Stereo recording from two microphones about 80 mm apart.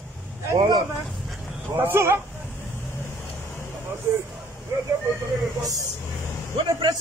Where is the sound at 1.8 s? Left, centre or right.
Right.